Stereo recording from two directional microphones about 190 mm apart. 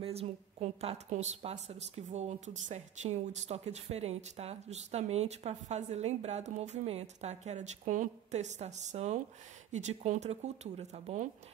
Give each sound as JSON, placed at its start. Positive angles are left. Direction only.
{"t": 0.0, "sound": "a woman's voice", "side_deg": -30}